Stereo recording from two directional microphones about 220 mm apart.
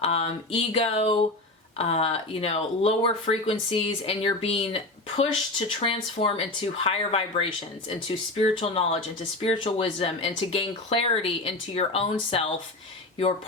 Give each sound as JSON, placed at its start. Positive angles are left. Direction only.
{"t": 0.0, "sound": "speech", "side_deg": 25}